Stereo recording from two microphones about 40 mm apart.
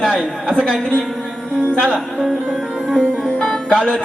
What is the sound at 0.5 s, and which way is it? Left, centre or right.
Speech, left.